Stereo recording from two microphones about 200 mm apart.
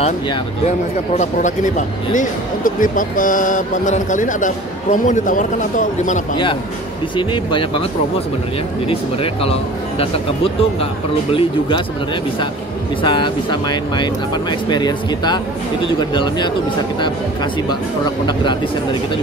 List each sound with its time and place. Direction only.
0.0 s speech: 30° left (ahead or behind)
7.2 s speech: 25° left (ahead or behind)
8.8 s speech: 30° left (ahead or behind)
13.0 s speech: 25° left (ahead or behind)
18.2 s speech: 20° left (ahead or behind)